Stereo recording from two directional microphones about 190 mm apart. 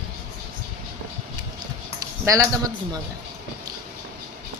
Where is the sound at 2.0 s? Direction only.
20° right (ahead or behind).